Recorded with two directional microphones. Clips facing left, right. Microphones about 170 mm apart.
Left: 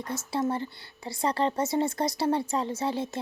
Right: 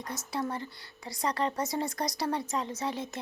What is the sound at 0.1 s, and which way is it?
Speech, 25° left (ahead or behind).